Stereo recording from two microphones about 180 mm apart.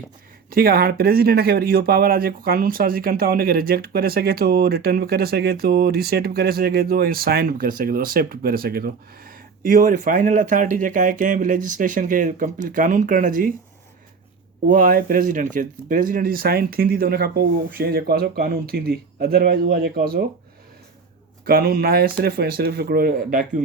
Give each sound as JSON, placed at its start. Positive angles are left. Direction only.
{"t": 0.5, "sound": "speech", "side_deg": -55}
{"t": 14.7, "sound": "speech", "side_deg": -50}
{"t": 21.4, "sound": "speech", "side_deg": -55}